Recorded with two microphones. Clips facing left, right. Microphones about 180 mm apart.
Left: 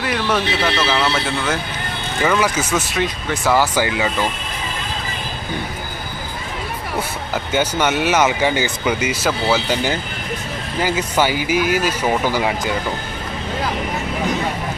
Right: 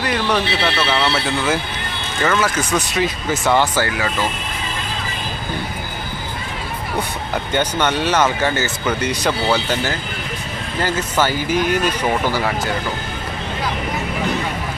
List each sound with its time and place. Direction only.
0.0 s speech: centre (ahead or behind)
2.2 s speech: 10° left (ahead or behind)
2.7 s speech: centre (ahead or behind)
3.8 s speech: 20° left (ahead or behind)
7.5 s speech: 10° left (ahead or behind)